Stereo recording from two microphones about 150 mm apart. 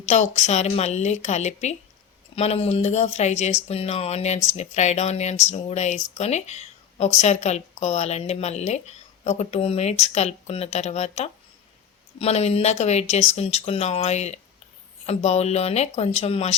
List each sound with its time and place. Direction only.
0.0 s speech: 50° left (ahead or behind)